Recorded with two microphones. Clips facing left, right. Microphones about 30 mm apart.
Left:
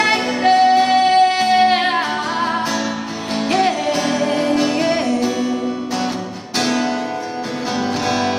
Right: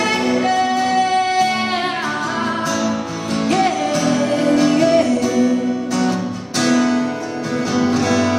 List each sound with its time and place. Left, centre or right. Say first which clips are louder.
0.0 s music: left 1 dB; left
3.4 s music: even; left
6.6 s music: right 4 dB; centre